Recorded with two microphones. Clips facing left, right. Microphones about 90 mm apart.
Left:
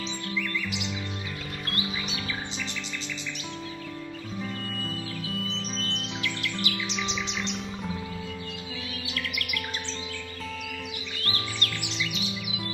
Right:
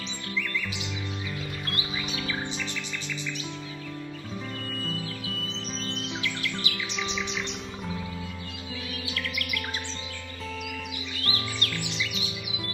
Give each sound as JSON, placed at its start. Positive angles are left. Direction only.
{"t": 5.8, "sound": "music", "side_deg": -20}
{"t": 6.7, "sound": "music", "side_deg": 20}
{"t": 11.2, "sound": "music", "side_deg": -20}